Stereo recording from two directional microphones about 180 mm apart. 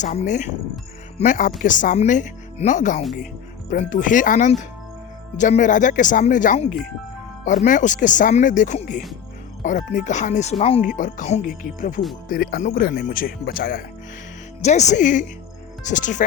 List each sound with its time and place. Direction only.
0.0 s speech: 40° left (ahead or behind)
14.6 s speech: 40° left (ahead or behind)